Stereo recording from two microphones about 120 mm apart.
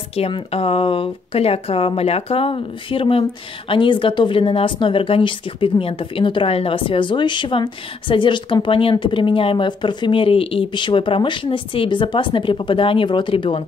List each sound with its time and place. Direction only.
0.2 s speech: 55° left (ahead or behind)